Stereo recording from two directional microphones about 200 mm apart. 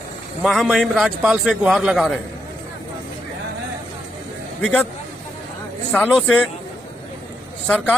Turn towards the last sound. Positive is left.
turn(degrees=5)  # may be behind; listen again after turning